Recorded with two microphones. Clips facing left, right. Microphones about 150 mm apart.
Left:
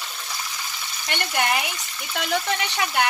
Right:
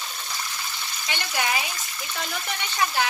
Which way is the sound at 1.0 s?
60° left (ahead or behind).